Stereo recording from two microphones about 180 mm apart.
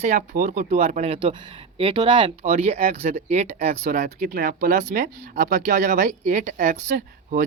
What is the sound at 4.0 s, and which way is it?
Speech, 55° right (ahead or behind).